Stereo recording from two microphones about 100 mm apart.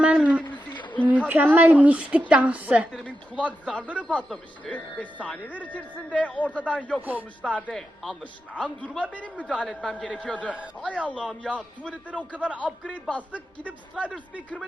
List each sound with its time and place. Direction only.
0.0 s a sound: 10° right (ahead or behind)
0.7 s a sound: 50° left (ahead or behind)
1.3 s a woman's voice: 15° right (ahead or behind)
2.9 s speech: 10° left (ahead or behind)
7.0 s a woman's voice: 15° right (ahead or behind)
7.4 s speech: 10° left (ahead or behind)
11.2 s a woman's voice: 10° right (ahead or behind)
12.9 s speech: 15° left (ahead or behind)